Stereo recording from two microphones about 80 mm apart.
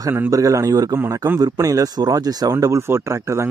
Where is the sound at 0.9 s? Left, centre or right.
Right.